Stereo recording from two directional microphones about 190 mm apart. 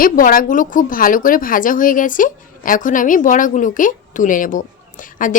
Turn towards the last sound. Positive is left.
turn(degrees=45)  # may be behind; listen again after turning